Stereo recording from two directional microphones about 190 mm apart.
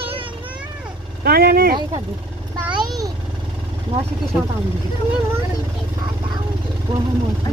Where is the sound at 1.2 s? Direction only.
55° right (ahead or behind).